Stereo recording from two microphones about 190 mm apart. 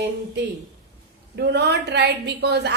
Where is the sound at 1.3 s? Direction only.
60° right (ahead or behind).